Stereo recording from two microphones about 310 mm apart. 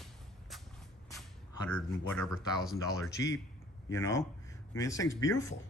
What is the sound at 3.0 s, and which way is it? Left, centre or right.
Speech, centre.